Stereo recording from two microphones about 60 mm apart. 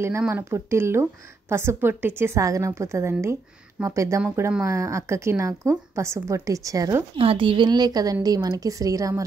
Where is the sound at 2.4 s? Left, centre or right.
Right.